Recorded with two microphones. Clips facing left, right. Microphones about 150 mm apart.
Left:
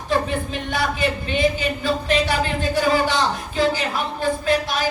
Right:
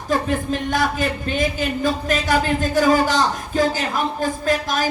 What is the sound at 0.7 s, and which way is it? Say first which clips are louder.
Speech: even; 45° right (ahead or behind).